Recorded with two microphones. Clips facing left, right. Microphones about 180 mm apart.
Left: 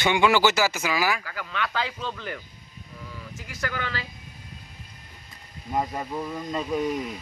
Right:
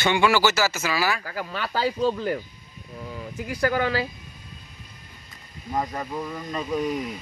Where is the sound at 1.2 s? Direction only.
40° right (ahead or behind).